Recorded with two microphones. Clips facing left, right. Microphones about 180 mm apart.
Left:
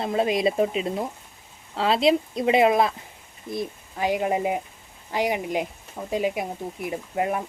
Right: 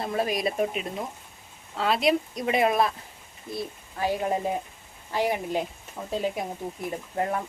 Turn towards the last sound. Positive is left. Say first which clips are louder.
# left 2 dB
turn(degrees=10)  # may be behind; listen again after turning